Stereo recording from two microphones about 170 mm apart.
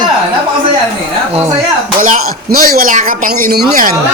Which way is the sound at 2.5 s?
60° right (ahead or behind).